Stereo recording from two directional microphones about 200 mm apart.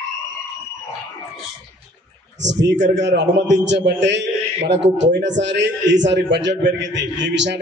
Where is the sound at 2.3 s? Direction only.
65° right (ahead or behind).